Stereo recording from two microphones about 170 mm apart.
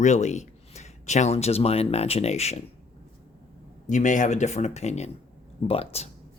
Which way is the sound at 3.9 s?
45° left (ahead or behind).